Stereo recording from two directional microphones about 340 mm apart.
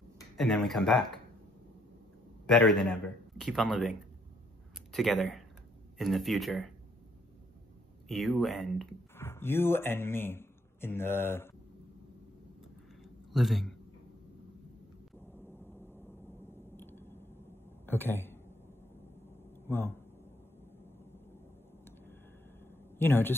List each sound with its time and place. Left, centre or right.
0.2 s speech: centre
2.4 s a man's voice: centre
4.9 s a man's voice: centre
8.1 s speech: centre
13.0 s a sound: centre
16.7 s a sound: centre
17.8 s speech: centre
19.7 s a man's voice: centre
22.9 s speech: centre